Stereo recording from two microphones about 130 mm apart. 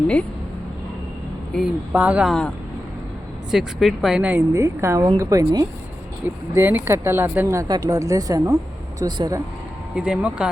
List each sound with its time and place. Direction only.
1.5 s speech: 10° right (ahead or behind)
3.5 s speech: centre (ahead or behind)
4.5 s speech: 20° right (ahead or behind)
6.2 s speech: 15° right (ahead or behind); by 9.4 s 30° right (ahead or behind)
9.9 s speech: 5° right (ahead or behind)